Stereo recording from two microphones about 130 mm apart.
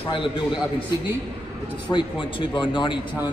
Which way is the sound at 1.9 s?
40° left (ahead or behind).